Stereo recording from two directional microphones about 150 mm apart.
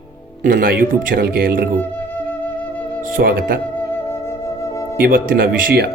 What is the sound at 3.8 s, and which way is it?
Music, 15° left (ahead or behind).